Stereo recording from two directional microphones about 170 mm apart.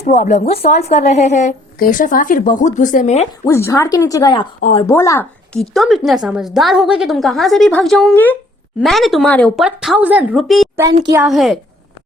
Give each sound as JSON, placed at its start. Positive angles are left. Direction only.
{"t": 0.0, "sound": "a woman's voice", "side_deg": 45}
{"t": 3.4, "sound": "speech", "side_deg": 15}
{"t": 5.5, "sound": "a woman's voice", "side_deg": 0}
{"t": 8.8, "sound": "a woman's voice", "side_deg": 0}